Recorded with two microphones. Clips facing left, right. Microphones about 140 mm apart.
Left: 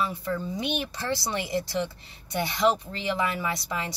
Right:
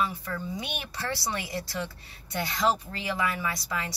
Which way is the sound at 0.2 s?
25° left (ahead or behind).